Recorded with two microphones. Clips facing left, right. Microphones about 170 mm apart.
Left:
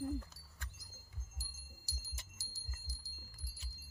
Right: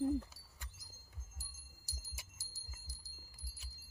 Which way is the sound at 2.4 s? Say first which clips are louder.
Left 4 dB; 75° left (ahead or behind).